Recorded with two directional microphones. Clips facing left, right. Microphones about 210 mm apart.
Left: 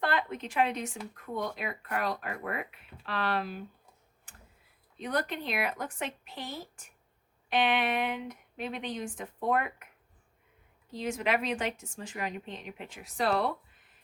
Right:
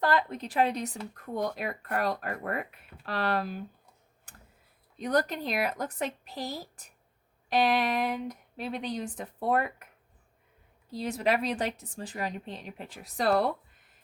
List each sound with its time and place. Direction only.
0.0 s speech: 35° right (ahead or behind)
4.9 s speech: 40° right (ahead or behind)
10.9 s speech: 35° right (ahead or behind)